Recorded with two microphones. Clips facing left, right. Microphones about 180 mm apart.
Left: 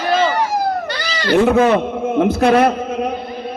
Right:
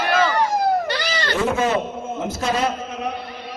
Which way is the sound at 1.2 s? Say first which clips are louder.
Left 9 dB; 60° left (ahead or behind).